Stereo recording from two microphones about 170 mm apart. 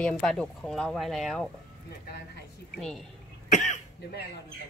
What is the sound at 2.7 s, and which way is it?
Speech, 5° left (ahead or behind).